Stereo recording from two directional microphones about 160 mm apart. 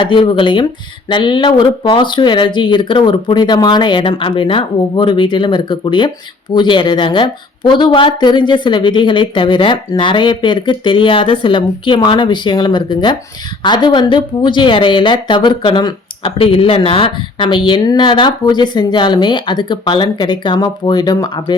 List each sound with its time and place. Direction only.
0.0 s a woman's voice: 30° left (ahead or behind)